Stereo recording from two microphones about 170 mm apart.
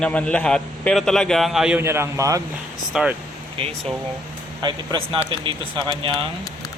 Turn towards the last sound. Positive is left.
turn(degrees=-30)  # may be behind; listen again after turning